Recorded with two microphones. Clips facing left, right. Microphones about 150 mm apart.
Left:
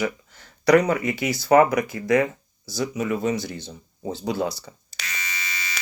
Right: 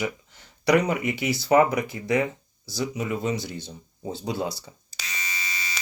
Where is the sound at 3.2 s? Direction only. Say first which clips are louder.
Left 3 dB; 20° right (ahead or behind).